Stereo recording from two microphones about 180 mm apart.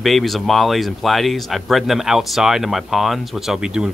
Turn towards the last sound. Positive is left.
turn(degrees=-5)  # may be behind; listen again after turning